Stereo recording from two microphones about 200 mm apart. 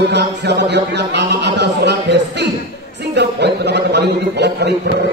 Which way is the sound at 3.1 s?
55° right (ahead or behind).